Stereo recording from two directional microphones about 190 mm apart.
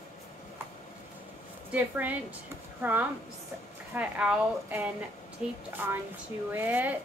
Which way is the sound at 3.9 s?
5° right (ahead or behind).